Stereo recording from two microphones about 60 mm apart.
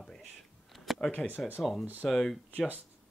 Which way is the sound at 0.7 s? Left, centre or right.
Centre.